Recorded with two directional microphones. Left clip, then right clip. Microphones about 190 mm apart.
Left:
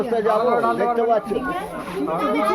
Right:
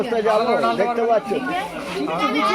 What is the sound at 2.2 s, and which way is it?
Speech, 65° left (ahead or behind).